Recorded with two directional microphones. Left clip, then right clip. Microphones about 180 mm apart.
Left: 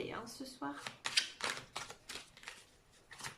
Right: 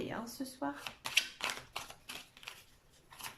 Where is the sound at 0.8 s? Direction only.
15° right (ahead or behind).